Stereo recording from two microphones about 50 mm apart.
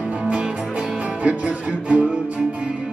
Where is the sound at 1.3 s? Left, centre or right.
Right.